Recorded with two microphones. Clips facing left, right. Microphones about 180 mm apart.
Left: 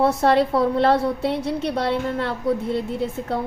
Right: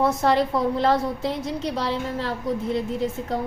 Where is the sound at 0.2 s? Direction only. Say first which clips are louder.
Left 3 dB; 65° left (ahead or behind).